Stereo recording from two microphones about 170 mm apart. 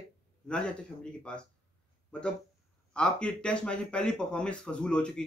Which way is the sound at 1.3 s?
5° left (ahead or behind).